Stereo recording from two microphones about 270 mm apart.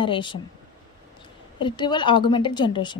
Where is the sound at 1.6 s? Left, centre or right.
Centre.